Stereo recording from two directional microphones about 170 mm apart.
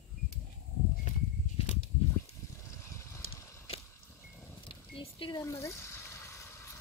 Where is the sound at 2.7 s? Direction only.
15° left (ahead or behind).